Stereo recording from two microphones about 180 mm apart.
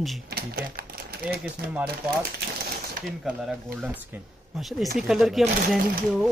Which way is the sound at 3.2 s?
Centre (ahead or behind).